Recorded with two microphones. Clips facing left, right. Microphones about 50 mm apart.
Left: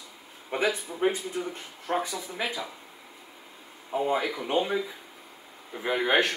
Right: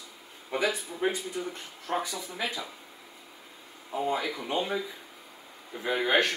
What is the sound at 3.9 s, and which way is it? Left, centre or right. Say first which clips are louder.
Speech: left 3 dB; centre.